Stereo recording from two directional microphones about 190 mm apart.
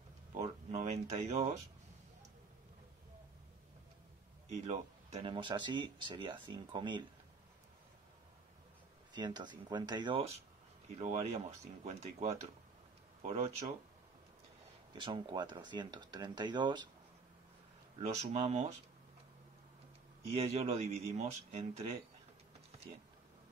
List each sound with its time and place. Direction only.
0.3 s a sound: 35° right (ahead or behind)
4.5 s speech: 35° right (ahead or behind)
9.1 s speech: 25° right (ahead or behind)
14.9 s speech: 25° right (ahead or behind)
17.9 s speech: 30° right (ahead or behind)
20.2 s speech: 30° right (ahead or behind)